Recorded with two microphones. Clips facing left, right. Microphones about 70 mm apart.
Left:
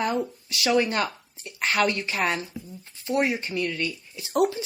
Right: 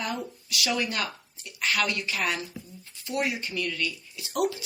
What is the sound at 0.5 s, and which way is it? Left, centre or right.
Speech, left.